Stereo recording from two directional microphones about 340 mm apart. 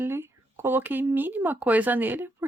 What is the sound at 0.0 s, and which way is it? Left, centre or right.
Speech, centre.